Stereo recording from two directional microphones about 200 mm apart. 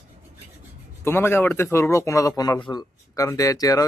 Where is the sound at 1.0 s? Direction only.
10° left (ahead or behind).